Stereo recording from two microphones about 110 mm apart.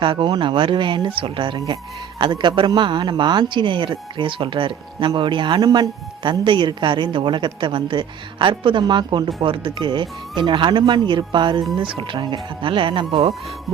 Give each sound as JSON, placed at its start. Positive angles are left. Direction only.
{"t": 0.0, "sound": "speech", "side_deg": -50}